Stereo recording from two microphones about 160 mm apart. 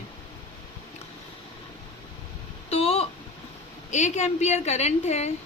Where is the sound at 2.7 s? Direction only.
40° left (ahead or behind).